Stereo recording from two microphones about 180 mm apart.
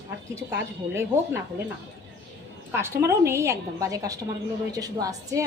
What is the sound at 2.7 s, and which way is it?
A woman's voice, 15° right (ahead or behind).